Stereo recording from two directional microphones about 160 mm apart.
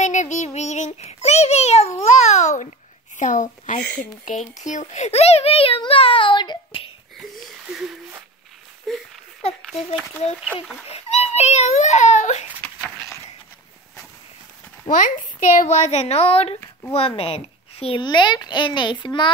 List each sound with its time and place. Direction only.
0.0 s child singing: 50° left (ahead or behind)
3.2 s a sound: 50° left (ahead or behind)
4.0 s a child's voice: 55° left (ahead or behind); by 6.9 s 30° left (ahead or behind)
7.2 s wheeze: centre (ahead or behind)
8.9 s a sound: centre (ahead or behind)
9.8 s a child's voice: 40° left (ahead or behind)
10.4 s speech: 5° right (ahead or behind)
10.9 s a child's voice: 40° left (ahead or behind)
14.9 s a woman's voice: 55° left (ahead or behind); by 19.3 s 30° left (ahead or behind)